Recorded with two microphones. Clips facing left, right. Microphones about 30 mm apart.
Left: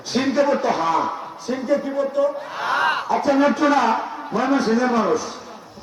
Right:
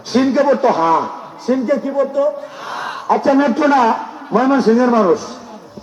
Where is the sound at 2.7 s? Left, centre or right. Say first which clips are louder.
Left 6 dB; left.